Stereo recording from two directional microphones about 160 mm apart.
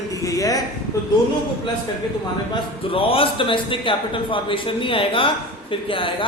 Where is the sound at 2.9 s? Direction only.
35° left (ahead or behind).